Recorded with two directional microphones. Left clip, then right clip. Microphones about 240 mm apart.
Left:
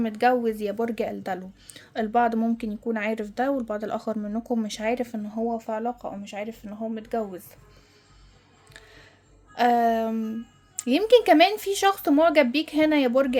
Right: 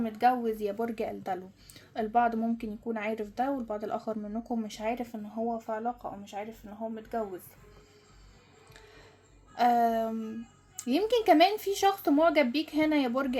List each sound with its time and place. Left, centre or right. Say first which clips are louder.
0.0 s a woman's voice: left 5 dB; left
9.6 s a woman's voice: left 4 dB; left